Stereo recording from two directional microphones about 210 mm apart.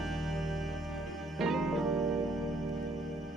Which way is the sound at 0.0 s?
Centre (ahead or behind).